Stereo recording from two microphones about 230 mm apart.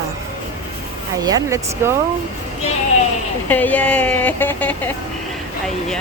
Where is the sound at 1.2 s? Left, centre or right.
Centre.